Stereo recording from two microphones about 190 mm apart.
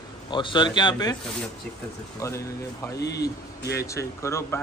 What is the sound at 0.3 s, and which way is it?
Speech, 25° left (ahead or behind).